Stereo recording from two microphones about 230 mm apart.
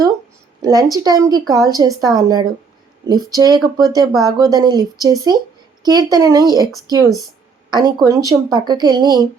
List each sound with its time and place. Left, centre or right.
0.6 s speech: centre